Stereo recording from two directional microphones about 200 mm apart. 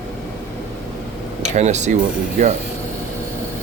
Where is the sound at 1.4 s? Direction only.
35° right (ahead or behind).